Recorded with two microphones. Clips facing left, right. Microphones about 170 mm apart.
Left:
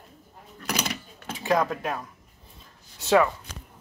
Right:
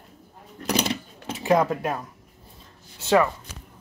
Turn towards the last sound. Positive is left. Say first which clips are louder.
# right 1 dB
turn(degrees=-5)  # may be behind; listen again after turning